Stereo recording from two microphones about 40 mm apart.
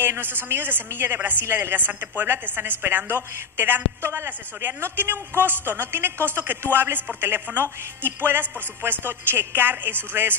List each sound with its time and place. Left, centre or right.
0.0 s a woman's voice: right
1.4 s a woman's voice: right
3.5 s a man's voice: right